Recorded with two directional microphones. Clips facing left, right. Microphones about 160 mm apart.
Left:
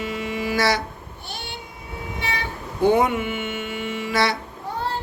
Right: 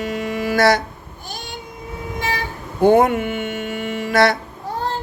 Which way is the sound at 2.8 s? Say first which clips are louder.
Right 5 dB; 50° right (ahead or behind).